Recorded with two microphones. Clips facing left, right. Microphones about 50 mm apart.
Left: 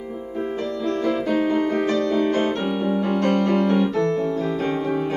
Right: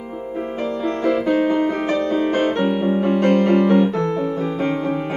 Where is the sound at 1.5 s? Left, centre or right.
Right.